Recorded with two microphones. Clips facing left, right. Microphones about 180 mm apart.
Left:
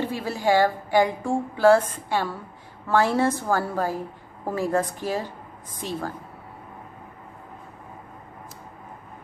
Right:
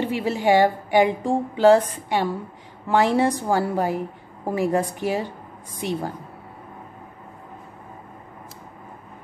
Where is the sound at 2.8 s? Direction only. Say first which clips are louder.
Right 2 dB; 15° right (ahead or behind).